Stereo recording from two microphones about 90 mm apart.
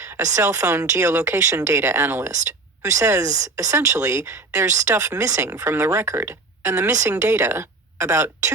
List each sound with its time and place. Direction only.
0.0 s speech: 35° right (ahead or behind)